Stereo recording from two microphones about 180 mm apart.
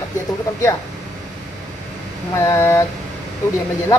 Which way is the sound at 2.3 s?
15° left (ahead or behind).